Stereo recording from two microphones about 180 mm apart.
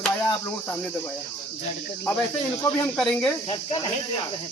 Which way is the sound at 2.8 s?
5° left (ahead or behind).